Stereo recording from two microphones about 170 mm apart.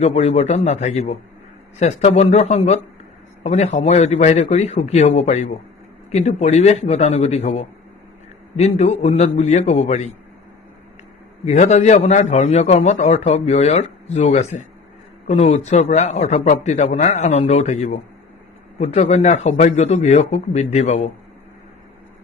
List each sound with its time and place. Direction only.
0.0 s speech: 40° left (ahead or behind)
11.4 s a man's voice: 40° left (ahead or behind)